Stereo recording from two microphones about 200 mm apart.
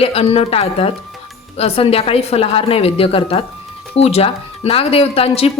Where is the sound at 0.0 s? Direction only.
30° left (ahead or behind).